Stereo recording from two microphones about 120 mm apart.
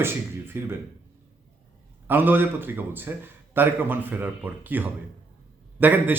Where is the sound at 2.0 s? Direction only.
15° right (ahead or behind).